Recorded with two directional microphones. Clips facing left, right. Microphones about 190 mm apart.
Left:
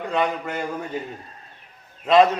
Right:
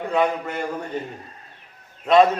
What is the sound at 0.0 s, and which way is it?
Speech, centre (ahead or behind).